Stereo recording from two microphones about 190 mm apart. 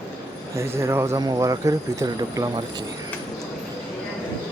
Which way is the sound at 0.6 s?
15° right (ahead or behind).